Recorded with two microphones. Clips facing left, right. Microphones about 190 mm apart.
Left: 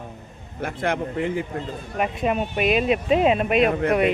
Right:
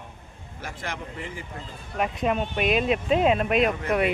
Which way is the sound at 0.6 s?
55° left (ahead or behind).